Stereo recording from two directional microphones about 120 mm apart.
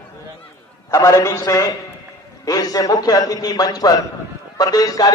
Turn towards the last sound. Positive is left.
turn(degrees=30)  # may be behind; listen again after turning